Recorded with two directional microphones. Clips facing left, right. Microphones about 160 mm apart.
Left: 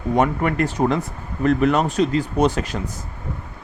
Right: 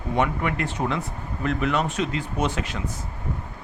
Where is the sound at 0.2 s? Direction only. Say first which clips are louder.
Left 4 dB; 45° left (ahead or behind).